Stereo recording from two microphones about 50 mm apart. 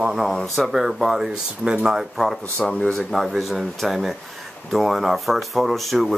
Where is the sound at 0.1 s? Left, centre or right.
Centre.